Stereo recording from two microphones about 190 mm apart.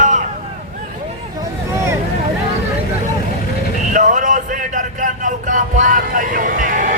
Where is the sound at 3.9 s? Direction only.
45° right (ahead or behind).